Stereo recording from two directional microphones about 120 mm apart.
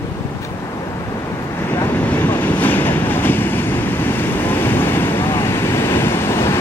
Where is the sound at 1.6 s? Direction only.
20° left (ahead or behind).